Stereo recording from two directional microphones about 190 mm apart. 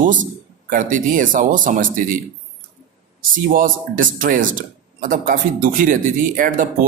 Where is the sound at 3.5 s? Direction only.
45° right (ahead or behind).